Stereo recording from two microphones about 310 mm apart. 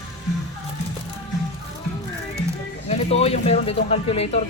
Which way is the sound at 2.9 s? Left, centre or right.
Left.